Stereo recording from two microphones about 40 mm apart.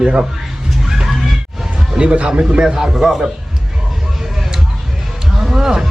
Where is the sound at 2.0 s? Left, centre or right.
Right.